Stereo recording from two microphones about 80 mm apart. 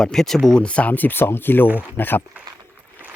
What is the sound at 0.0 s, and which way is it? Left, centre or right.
Speech, centre.